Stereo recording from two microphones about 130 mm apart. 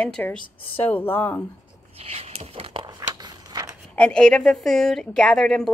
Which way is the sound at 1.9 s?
55° right (ahead or behind).